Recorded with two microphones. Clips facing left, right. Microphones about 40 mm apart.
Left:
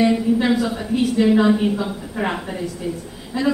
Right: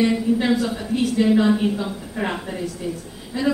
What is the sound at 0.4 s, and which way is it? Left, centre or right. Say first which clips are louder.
A woman's voice: left 2 dB; centre.